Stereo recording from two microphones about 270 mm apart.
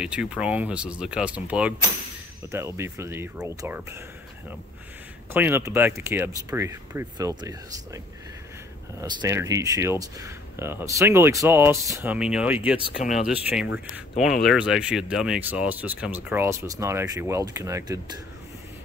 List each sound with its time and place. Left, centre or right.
0.0 s speech: centre
5.3 s speech: centre
9.0 s speech: centre
12.9 s speech: left
13.3 s speech: centre